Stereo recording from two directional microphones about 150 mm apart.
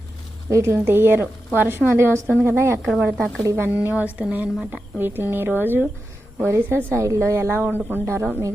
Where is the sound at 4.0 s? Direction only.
10° right (ahead or behind).